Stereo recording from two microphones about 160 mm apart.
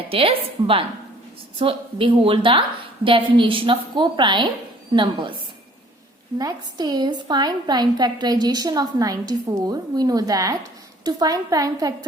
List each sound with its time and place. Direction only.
0.1 s a woman's voice: 35° right (ahead or behind)
6.4 s a woman's voice: 25° right (ahead or behind)